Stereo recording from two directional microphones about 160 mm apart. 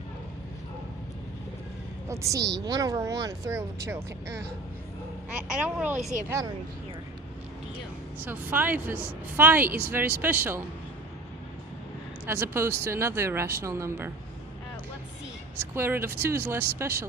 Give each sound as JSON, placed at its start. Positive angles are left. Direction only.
{"t": 2.0, "sound": "a woman's voice", "side_deg": -20}
{"t": 8.2, "sound": "a woman's voice", "side_deg": -10}
{"t": 12.2, "sound": "a woman's voice", "side_deg": -15}
{"t": 15.7, "sound": "a woman's voice", "side_deg": -15}